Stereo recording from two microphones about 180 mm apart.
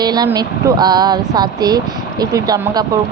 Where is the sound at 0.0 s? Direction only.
20° right (ahead or behind).